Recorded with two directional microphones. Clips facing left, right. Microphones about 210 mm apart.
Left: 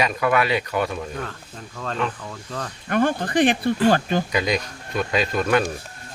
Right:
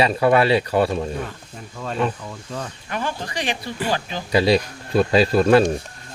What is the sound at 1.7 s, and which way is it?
Speech, 10° right (ahead or behind).